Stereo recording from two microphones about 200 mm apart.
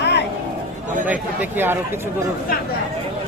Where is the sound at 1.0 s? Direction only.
10° right (ahead or behind).